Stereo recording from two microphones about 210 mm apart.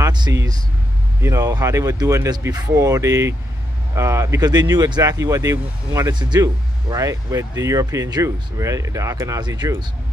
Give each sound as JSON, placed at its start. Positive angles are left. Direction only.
{"t": 0.0, "sound": "vehicle", "side_deg": -20}
{"t": 1.2, "sound": "speech", "side_deg": -15}